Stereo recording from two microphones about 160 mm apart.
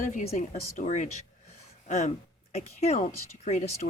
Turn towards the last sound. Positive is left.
turn(degrees=50)  # may be behind; listen again after turning